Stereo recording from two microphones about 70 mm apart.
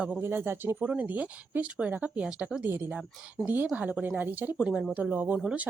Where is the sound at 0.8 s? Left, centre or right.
Centre.